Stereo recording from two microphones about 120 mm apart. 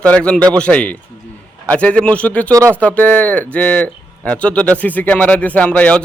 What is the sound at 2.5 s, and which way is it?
Speech, 25° right (ahead or behind).